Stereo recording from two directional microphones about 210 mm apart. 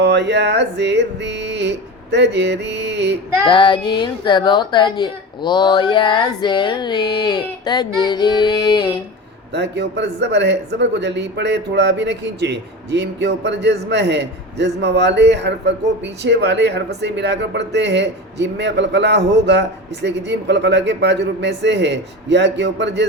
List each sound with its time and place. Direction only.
0.0 s speech: 55° right (ahead or behind)
3.4 s speech: 25° left (ahead or behind)
9.5 s speech: 55° right (ahead or behind)